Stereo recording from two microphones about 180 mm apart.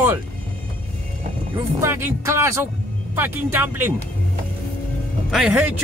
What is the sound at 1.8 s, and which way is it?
Speech, 15° right (ahead or behind).